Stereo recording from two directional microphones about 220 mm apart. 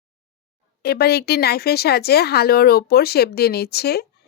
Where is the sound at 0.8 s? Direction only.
45° left (ahead or behind).